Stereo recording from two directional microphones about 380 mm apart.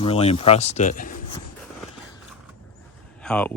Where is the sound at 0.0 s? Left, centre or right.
Centre.